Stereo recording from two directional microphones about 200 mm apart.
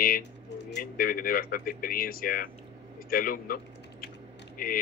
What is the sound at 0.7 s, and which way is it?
Speech, 50° left (ahead or behind).